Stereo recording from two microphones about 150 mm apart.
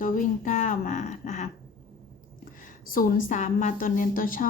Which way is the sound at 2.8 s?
70° left (ahead or behind).